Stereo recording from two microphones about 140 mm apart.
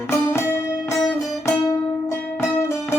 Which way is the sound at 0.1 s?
20° left (ahead or behind).